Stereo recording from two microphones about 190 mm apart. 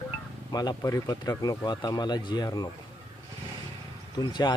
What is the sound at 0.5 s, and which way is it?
Speech, 20° left (ahead or behind).